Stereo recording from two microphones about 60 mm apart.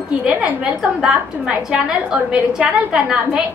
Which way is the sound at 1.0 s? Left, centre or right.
Centre.